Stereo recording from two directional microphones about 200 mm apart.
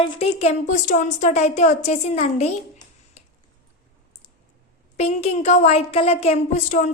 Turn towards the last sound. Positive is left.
turn(degrees=35)  # may be behind; listen again after turning